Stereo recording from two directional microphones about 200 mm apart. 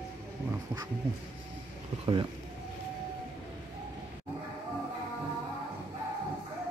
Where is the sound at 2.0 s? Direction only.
25° right (ahead or behind).